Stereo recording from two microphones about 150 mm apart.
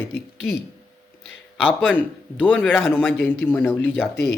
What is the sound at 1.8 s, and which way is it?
Speech, 10° left (ahead or behind).